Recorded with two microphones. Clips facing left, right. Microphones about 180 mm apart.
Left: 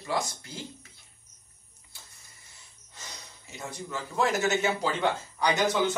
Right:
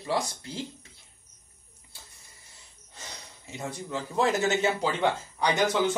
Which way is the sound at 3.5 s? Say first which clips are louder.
Right 3 dB; 25° right (ahead or behind).